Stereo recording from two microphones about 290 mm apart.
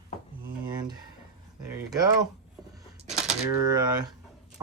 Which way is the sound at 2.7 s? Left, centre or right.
Right.